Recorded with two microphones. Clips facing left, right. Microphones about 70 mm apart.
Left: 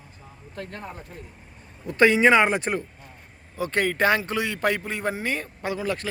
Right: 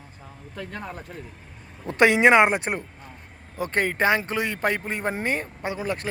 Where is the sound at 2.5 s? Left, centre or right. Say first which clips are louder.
Left 1 dB; right.